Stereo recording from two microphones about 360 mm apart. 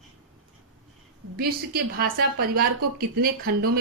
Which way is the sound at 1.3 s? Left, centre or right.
Right.